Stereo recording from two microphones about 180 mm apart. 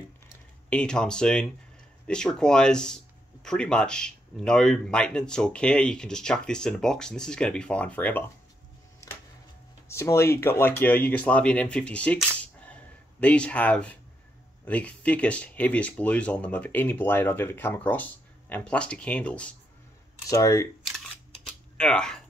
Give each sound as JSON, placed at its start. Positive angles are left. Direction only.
{"t": 0.7, "sound": "speech", "side_deg": 5}
{"t": 9.8, "sound": "speech", "side_deg": 15}
{"t": 20.2, "sound": "speech", "side_deg": 20}
{"t": 21.7, "sound": "speech", "side_deg": 5}